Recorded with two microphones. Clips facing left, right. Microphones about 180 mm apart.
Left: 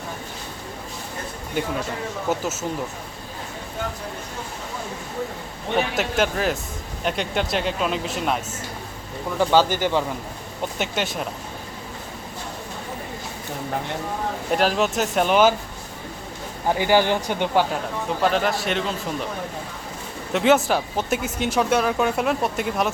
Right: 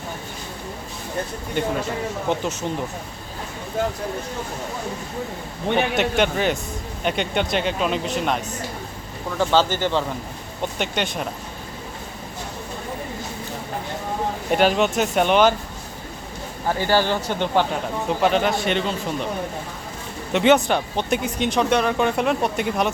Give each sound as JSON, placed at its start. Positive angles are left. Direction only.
{"t": 1.6, "sound": "speech", "side_deg": 5}
{"t": 5.7, "sound": "speech", "side_deg": 0}
{"t": 9.4, "sound": "speech", "side_deg": 10}
{"t": 14.5, "sound": "speech", "side_deg": 0}
{"t": 16.6, "sound": "speech", "side_deg": 15}
{"t": 20.3, "sound": "speech", "side_deg": 0}